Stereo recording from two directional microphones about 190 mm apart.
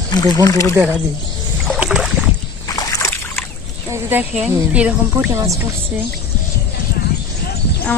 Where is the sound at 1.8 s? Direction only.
5° right (ahead or behind).